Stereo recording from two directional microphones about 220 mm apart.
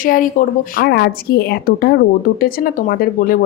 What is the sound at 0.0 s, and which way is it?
A woman's voice, 40° left (ahead or behind).